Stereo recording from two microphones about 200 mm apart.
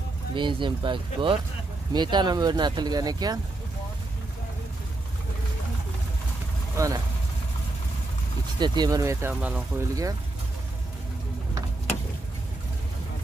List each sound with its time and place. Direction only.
0.4 s speech: 25° right (ahead or behind)
6.8 s speech: 15° right (ahead or behind)
8.5 s speech: 20° right (ahead or behind)